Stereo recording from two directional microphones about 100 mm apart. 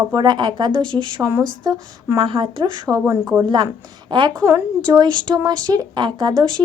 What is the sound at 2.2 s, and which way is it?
Speech, 60° right (ahead or behind).